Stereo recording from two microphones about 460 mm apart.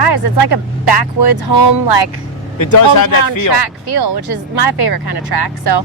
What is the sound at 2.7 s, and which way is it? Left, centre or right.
Speech, left.